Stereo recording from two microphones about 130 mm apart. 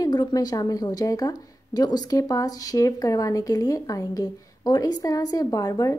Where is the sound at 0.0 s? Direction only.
30° left (ahead or behind).